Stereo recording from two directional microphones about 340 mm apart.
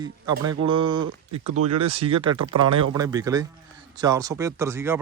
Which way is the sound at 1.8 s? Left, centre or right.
Centre.